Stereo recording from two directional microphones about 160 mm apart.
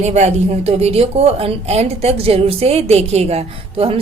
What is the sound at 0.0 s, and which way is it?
A woman's voice, 45° right (ahead or behind).